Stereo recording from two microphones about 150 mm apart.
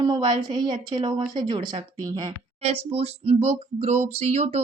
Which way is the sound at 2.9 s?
45° right (ahead or behind).